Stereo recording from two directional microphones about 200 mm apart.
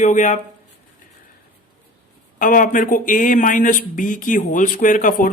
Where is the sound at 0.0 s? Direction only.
40° left (ahead or behind).